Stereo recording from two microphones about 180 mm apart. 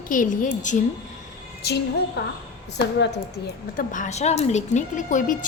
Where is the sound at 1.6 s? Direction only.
65° left (ahead or behind).